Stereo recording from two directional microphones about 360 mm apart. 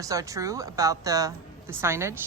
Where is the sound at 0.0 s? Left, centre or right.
Centre.